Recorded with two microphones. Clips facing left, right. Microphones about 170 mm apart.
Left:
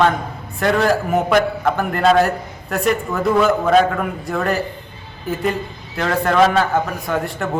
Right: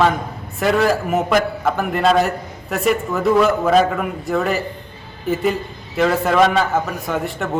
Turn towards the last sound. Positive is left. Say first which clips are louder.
# left 1 dB
turn(degrees=0)  # may be behind; listen again after turning